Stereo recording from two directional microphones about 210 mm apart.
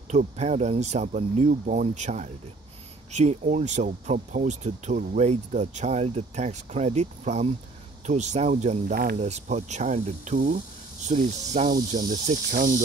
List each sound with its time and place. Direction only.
0.1 s speech: 35° right (ahead or behind)